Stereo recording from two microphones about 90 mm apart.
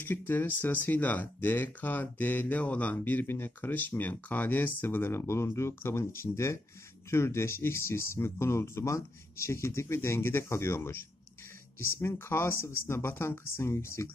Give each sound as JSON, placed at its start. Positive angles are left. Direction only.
{"t": 0.0, "sound": "speech", "side_deg": 25}